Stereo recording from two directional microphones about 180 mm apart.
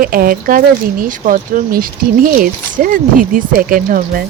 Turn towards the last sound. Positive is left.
turn(degrees=-50)  # may be behind; listen again after turning